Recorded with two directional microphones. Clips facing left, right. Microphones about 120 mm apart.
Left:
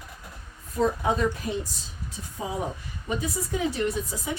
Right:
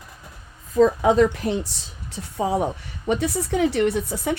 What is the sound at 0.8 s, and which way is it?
A woman's voice, 90° right.